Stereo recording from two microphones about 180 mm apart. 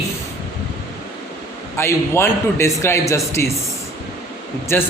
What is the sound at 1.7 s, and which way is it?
A man's voice, 15° left (ahead or behind).